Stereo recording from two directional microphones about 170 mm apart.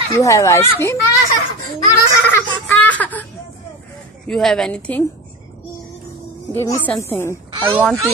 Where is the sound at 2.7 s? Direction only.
10° left (ahead or behind).